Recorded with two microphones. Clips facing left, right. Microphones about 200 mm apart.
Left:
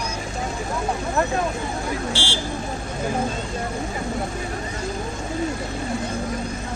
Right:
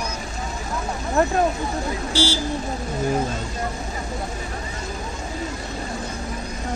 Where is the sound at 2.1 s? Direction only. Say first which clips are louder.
Right 5 dB; 40° right (ahead or behind).